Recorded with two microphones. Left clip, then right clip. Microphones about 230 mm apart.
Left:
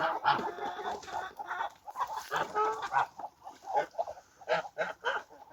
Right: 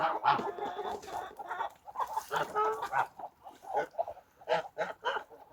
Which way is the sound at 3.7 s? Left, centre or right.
Right.